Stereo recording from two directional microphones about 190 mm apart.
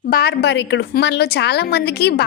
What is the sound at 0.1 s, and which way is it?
A woman's voice, 55° left (ahead or behind).